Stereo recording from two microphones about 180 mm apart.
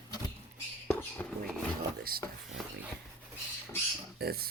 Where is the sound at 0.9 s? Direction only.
10° left (ahead or behind).